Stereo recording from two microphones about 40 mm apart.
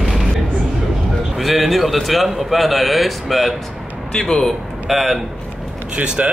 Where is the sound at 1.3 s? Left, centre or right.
Centre.